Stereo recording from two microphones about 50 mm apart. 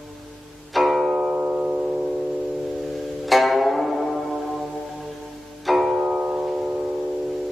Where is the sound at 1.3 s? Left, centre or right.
Right.